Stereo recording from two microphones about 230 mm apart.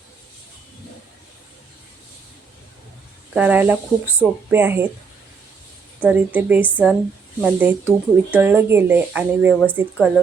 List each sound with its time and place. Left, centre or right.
3.3 s speech: centre
6.0 s speech: centre